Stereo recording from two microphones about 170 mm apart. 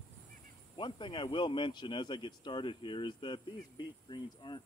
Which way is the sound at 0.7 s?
30° left (ahead or behind).